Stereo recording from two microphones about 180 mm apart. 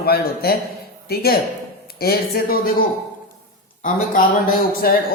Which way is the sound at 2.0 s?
55° left (ahead or behind).